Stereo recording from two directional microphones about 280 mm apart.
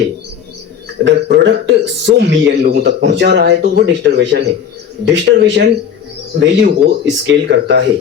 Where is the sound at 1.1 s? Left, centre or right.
Right.